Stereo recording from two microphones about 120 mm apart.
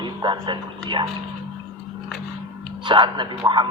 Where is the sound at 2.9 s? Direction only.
40° right (ahead or behind).